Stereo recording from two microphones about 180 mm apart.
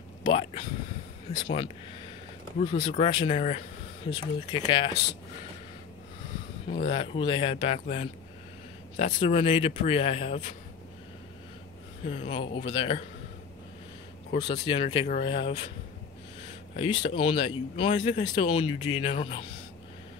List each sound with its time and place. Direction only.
0.2 s speech: 30° left (ahead or behind)
4.1 s speech: 25° left (ahead or behind)
6.9 s speech: 30° left (ahead or behind)
12.0 s speech: 35° left (ahead or behind)
14.5 s speech: 30° left (ahead or behind)
16.7 s speech: 30° left (ahead or behind)